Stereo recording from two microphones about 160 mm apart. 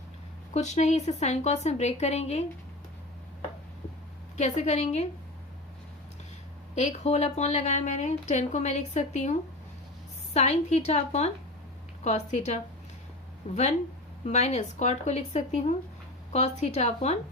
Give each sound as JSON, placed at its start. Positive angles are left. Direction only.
{"t": 0.5, "sound": "a woman's voice", "side_deg": 45}
{"t": 4.4, "sound": "a woman's voice", "side_deg": 45}
{"t": 6.7, "sound": "a woman's voice", "side_deg": 45}
{"t": 10.3, "sound": "a woman's voice", "side_deg": 45}